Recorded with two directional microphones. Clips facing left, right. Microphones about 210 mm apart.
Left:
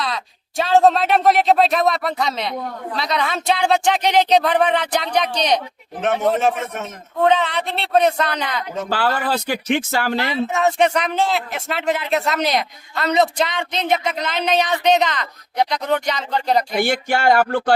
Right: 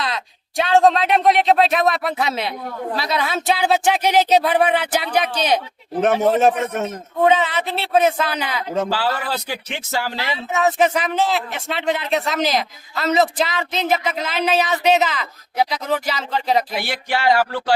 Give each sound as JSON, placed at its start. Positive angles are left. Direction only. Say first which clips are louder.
{"t": 0.0, "sound": "speech", "louder": "even", "side_deg": 0}
{"t": 6.8, "sound": "speech", "louder": "even", "side_deg": -5}
{"t": 8.9, "sound": "speech", "louder": "left 2 dB", "side_deg": 50}
{"t": 10.2, "sound": "speech", "louder": "left 1 dB", "side_deg": 0}
{"t": 16.7, "sound": "speech", "louder": "left 5 dB", "side_deg": 45}